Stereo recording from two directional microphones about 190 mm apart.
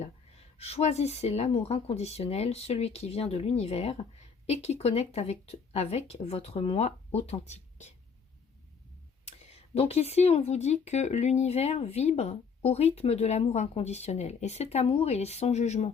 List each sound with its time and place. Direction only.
0.0 s speech: 35° left (ahead or behind)
9.4 s speech: 35° left (ahead or behind)